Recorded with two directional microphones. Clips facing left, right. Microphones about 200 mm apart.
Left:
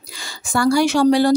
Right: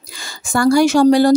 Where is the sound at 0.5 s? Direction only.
45° right (ahead or behind).